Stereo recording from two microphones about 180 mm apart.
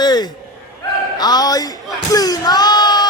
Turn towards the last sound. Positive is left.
turn(degrees=25)  # may be behind; listen again after turning